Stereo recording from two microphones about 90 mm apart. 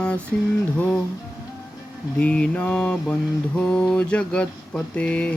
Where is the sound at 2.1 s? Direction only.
15° left (ahead or behind).